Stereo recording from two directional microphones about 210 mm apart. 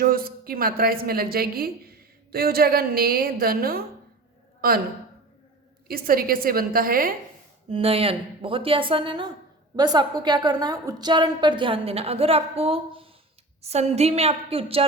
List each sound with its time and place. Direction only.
0.0 s a woman's voice: 45° right (ahead or behind)
5.9 s a woman's voice: 45° right (ahead or behind)
7.7 s a woman's voice: 30° right (ahead or behind)